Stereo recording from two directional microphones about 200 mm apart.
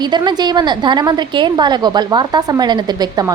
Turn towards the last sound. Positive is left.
turn(degrees=-20)  # may be behind; listen again after turning